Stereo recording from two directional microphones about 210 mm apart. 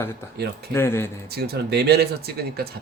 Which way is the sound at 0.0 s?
10° left (ahead or behind).